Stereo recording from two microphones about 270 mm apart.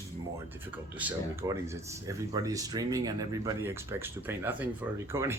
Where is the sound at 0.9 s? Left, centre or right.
Centre.